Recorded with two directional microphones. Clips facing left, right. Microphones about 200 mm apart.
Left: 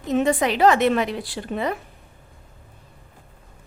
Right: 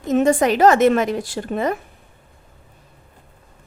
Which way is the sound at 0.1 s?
45° right (ahead or behind).